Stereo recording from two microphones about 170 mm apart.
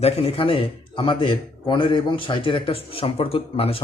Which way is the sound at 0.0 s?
35° left (ahead or behind).